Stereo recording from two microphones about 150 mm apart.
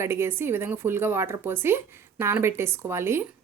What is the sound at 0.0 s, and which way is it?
A woman's voice, 15° right (ahead or behind).